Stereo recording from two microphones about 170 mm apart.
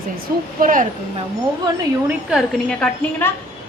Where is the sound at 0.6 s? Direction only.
50° right (ahead or behind).